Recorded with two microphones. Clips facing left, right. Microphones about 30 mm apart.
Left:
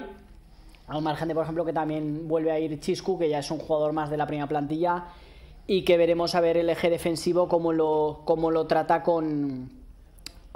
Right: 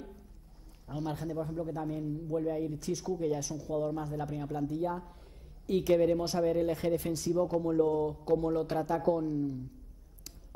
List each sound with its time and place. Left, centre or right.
0.8 s a man's voice: left